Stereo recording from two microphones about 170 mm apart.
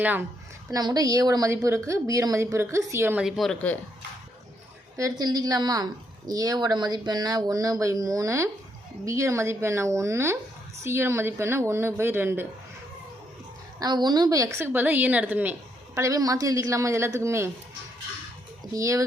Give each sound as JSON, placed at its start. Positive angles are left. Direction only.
{"t": 0.0, "sound": "a woman's voice", "side_deg": -10}
{"t": 0.7, "sound": "a woman's voice", "side_deg": -25}
{"t": 4.9, "sound": "a woman's voice", "side_deg": -20}
{"t": 13.7, "sound": "a woman's voice", "side_deg": -25}
{"t": 18.7, "sound": "a woman's voice", "side_deg": -20}